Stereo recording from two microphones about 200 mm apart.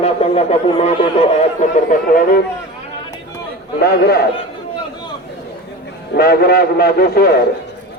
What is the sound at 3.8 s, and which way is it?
Speech, 55° left (ahead or behind).